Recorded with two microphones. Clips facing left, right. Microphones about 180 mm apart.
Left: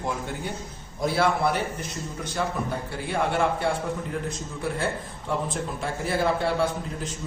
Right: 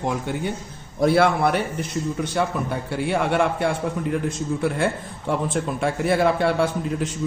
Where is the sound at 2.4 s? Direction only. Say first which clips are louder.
Right 2 dB; 75° right (ahead or behind).